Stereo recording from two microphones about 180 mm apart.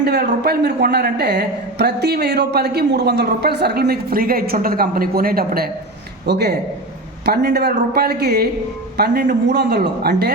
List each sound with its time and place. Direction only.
0.0 s a woman's voice: 60° right (ahead or behind)
6.2 s a man's voice: 70° right (ahead or behind)